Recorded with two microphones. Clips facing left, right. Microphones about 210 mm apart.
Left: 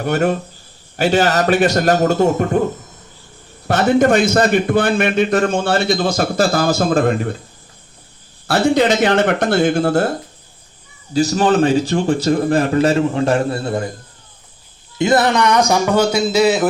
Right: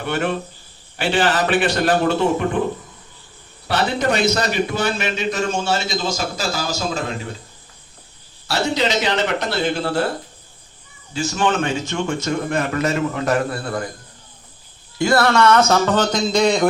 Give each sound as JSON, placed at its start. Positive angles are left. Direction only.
{"t": 0.0, "sound": "a man's voice", "side_deg": 45}
{"t": 3.7, "sound": "a man's voice", "side_deg": 45}
{"t": 8.4, "sound": "a man's voice", "side_deg": 55}
{"t": 11.1, "sound": "a man's voice", "side_deg": 35}
{"t": 14.9, "sound": "a man's voice", "side_deg": 20}